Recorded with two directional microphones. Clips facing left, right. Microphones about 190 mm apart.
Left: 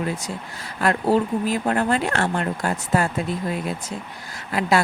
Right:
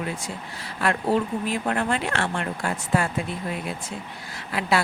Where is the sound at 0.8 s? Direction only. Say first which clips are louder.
Left 3 dB; 40° left (ahead or behind).